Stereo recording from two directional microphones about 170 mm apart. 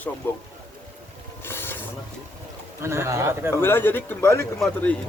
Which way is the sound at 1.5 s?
15° left (ahead or behind).